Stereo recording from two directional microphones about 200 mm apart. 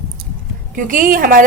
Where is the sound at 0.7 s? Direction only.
40° right (ahead or behind).